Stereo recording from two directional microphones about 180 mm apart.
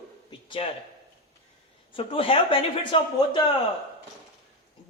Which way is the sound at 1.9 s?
30° left (ahead or behind).